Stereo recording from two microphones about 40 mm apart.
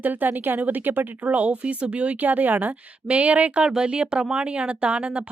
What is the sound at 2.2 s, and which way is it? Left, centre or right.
Speech, right.